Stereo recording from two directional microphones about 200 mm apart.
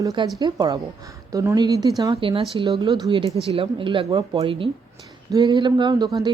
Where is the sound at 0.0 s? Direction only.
20° right (ahead or behind).